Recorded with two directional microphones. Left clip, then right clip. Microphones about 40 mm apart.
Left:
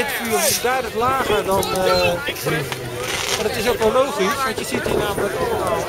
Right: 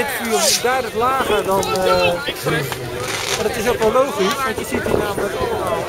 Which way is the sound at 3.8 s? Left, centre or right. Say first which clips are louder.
Right 2 dB; centre.